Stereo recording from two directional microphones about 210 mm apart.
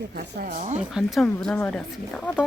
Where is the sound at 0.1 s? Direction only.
45° right (ahead or behind).